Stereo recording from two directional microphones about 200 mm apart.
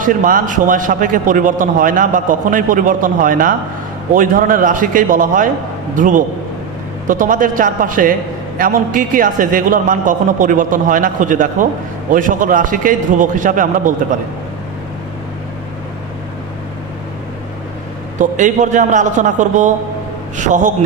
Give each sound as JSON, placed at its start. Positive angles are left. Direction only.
{"t": 0.0, "sound": "a man's voice", "side_deg": -40}
{"t": 18.2, "sound": "a man's voice", "side_deg": -40}